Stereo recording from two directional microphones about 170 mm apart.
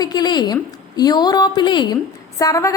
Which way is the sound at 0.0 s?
25° left (ahead or behind).